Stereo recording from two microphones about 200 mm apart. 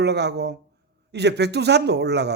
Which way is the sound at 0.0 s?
55° right (ahead or behind).